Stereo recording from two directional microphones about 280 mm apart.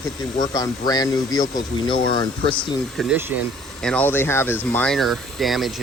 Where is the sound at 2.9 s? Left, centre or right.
Centre.